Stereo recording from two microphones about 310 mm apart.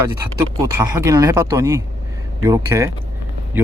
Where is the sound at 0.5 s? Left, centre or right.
Centre.